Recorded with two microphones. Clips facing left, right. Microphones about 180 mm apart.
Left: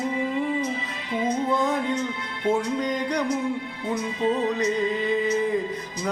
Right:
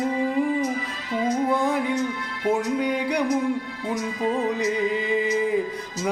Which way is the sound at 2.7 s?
10° right (ahead or behind).